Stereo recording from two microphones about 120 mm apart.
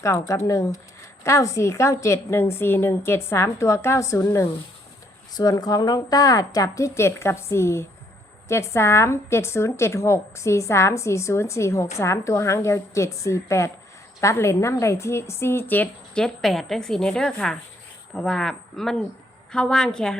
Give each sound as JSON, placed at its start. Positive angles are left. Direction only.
{"t": 0.0, "sound": "a woman's voice", "side_deg": 25}